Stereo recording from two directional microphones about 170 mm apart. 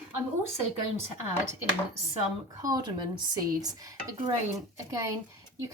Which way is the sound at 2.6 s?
20° right (ahead or behind).